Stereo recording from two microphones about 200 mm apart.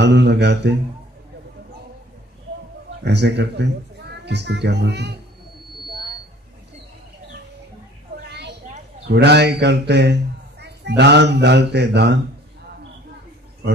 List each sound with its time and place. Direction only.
0.0 s a man's voice: 60° right (ahead or behind)
3.0 s a man's voice: 60° right (ahead or behind)
8.3 s a sound: 55° right (ahead or behind)
9.0 s a man's voice: 55° right (ahead or behind)